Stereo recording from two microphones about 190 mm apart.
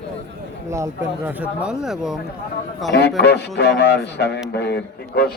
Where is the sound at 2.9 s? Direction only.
65° left (ahead or behind).